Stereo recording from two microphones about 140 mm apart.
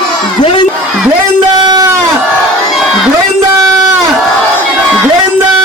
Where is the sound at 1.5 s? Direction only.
30° right (ahead or behind).